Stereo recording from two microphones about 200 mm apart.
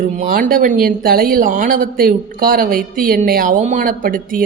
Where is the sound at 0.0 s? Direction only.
45° right (ahead or behind).